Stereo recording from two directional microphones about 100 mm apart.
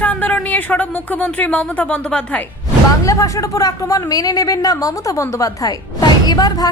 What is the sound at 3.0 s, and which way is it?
A woman's voice, 35° left (ahead or behind).